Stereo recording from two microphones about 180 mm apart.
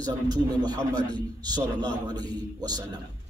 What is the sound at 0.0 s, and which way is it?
Speech, 25° right (ahead or behind).